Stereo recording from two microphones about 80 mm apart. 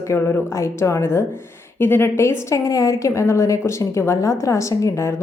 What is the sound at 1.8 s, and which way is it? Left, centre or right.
A woman's voice, left.